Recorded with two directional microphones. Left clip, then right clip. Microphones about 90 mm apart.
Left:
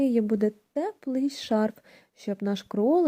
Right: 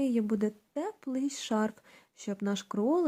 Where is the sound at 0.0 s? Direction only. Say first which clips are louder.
Left 6 dB; 35° left (ahead or behind).